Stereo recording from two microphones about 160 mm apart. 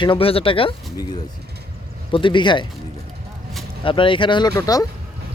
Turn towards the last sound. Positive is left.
turn(degrees=20)  # may be behind; listen again after turning